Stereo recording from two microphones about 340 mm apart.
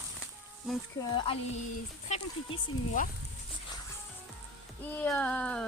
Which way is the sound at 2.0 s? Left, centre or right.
Centre.